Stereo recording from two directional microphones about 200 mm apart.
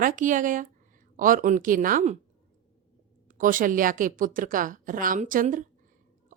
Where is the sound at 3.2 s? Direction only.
45° right (ahead or behind).